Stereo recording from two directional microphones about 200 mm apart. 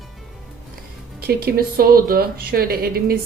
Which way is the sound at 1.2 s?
50° right (ahead or behind).